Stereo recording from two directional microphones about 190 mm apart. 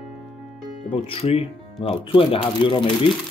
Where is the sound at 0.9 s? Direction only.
30° left (ahead or behind).